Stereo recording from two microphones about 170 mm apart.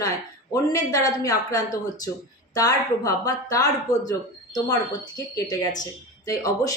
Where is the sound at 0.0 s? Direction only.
20° left (ahead or behind).